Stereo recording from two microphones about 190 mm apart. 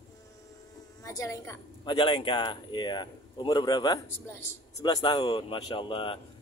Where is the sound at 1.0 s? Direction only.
15° left (ahead or behind).